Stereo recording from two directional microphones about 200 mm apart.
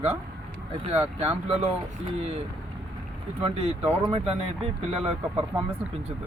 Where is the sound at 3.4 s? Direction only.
30° right (ahead or behind).